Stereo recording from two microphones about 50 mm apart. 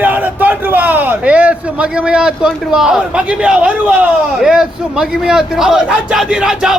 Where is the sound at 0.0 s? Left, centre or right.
Right.